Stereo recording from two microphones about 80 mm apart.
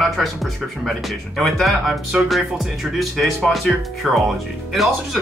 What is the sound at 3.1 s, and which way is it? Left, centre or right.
Speech, centre.